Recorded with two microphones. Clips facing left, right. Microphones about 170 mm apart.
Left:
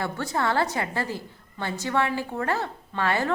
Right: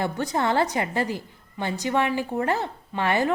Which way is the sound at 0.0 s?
20° right (ahead or behind).